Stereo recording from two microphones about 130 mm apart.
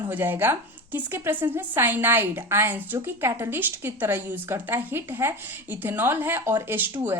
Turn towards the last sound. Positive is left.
turn(degrees=-15)  # may be behind; listen again after turning